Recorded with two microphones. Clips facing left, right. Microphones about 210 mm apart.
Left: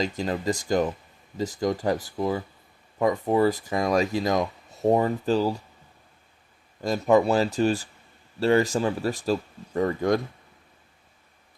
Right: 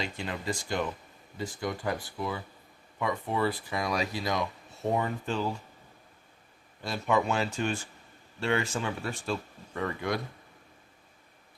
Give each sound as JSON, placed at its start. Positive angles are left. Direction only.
{"t": 0.0, "sound": "speech", "side_deg": 40}
{"t": 6.8, "sound": "speech", "side_deg": 40}